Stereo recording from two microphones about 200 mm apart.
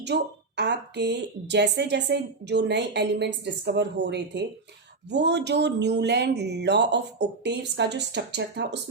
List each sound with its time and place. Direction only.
0.0 s a woman's voice: 60° right (ahead or behind)